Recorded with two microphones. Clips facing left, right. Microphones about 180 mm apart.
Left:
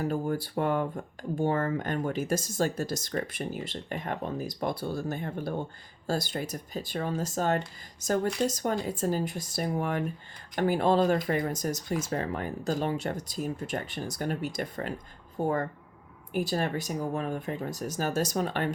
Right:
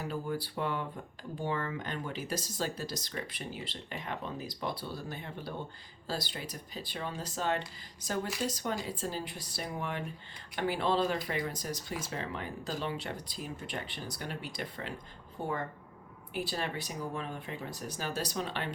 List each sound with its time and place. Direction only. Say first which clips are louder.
0.0 s speech: left 6 dB; 45° left (ahead or behind)